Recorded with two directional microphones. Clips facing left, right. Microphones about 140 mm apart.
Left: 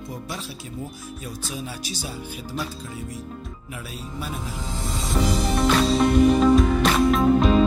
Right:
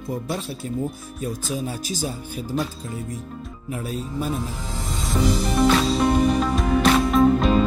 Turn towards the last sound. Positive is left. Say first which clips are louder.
# right 1 dB
turn(degrees=0)  # may be behind; listen again after turning